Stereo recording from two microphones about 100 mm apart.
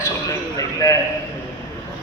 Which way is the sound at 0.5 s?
35° left (ahead or behind).